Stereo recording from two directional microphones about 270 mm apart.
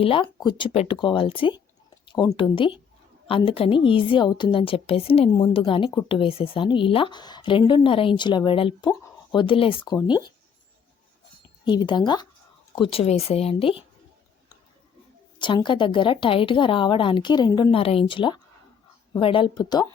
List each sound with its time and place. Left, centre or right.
0.0 s a woman's voice: centre
11.6 s a woman's voice: centre
15.4 s a woman's voice: centre